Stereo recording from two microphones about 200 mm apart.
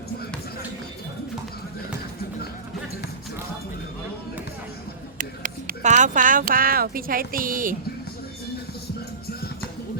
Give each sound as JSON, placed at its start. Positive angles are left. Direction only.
{"t": 5.1, "sound": "speech", "side_deg": -40}